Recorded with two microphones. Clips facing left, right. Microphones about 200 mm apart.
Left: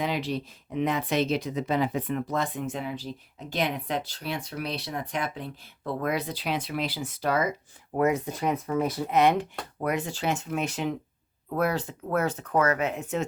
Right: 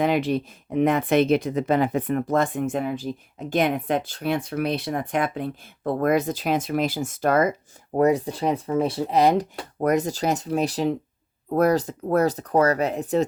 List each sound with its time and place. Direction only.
0.0 s speech: 50° right (ahead or behind)
7.9 s speech: 35° right (ahead or behind)